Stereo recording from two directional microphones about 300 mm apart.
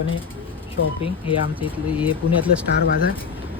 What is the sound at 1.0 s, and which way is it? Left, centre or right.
Speech, centre.